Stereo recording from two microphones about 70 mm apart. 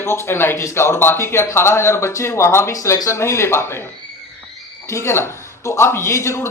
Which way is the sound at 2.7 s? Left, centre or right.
Left.